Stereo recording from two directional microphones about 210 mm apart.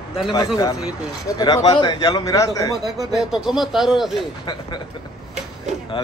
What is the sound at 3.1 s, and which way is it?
Speech, centre (ahead or behind).